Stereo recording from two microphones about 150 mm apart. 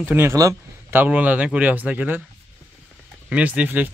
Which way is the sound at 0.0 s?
15° right (ahead or behind).